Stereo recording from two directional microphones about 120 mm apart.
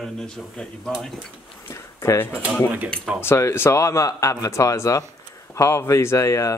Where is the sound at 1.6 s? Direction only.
25° left (ahead or behind).